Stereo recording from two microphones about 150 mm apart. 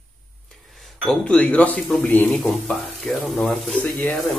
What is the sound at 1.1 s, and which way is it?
Speech, 5° left (ahead or behind).